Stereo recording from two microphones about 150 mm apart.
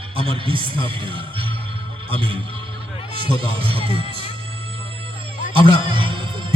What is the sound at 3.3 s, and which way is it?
Speech, 35° right (ahead or behind).